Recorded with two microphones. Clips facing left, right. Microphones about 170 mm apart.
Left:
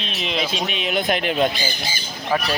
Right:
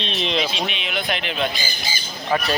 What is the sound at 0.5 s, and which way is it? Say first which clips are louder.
Speech: left 3 dB; 45° left (ahead or behind).